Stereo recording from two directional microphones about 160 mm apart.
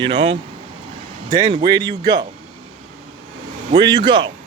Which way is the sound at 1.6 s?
25° right (ahead or behind).